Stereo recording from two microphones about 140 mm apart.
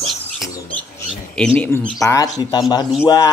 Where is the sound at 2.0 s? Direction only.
25° left (ahead or behind).